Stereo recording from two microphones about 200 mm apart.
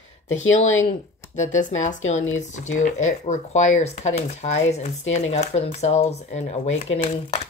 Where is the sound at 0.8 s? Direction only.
35° left (ahead or behind).